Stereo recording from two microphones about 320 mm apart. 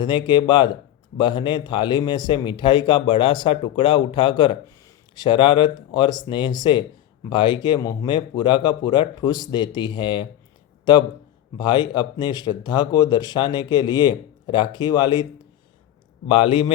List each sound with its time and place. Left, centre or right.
0.0 s speech: centre